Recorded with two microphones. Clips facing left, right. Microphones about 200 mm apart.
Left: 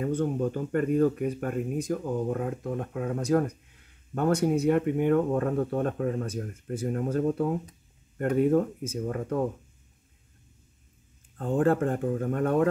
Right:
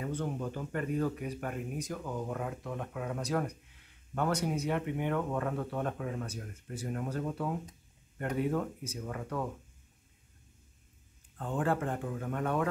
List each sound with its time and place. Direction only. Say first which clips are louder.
0.0 s speech: left 8 dB; 45° left (ahead or behind)
11.3 s speech: left 8 dB; 45° left (ahead or behind)